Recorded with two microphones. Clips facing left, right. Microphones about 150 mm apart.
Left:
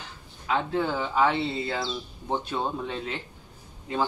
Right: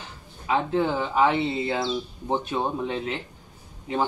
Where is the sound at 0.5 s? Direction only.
15° right (ahead or behind).